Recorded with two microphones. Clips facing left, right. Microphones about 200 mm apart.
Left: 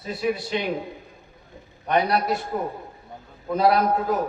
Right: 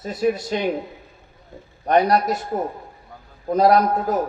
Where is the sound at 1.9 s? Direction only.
40° right (ahead or behind).